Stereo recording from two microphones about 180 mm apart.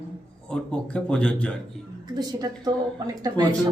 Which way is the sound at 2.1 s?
20° right (ahead or behind).